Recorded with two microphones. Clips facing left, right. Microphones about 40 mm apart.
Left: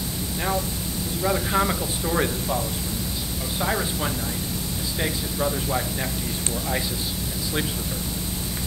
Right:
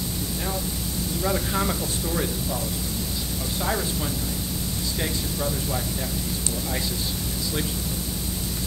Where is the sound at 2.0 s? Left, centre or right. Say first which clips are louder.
Left 5 dB; left.